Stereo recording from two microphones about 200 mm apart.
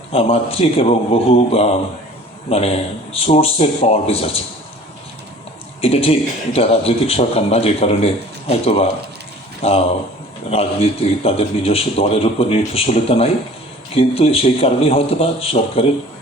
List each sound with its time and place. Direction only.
0.1 s speech: 30° left (ahead or behind)
5.8 s speech: 30° left (ahead or behind)